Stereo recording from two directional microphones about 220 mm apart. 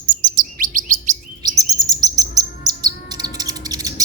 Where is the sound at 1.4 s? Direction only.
15° right (ahead or behind).